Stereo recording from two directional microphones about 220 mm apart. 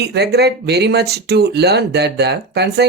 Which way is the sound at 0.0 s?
50° right (ahead or behind).